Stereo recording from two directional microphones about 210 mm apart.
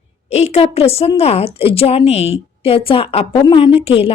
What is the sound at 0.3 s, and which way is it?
A woman's voice, 30° left (ahead or behind).